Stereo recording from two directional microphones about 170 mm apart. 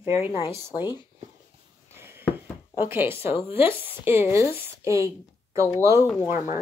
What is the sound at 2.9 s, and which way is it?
A woman's voice, 15° right (ahead or behind).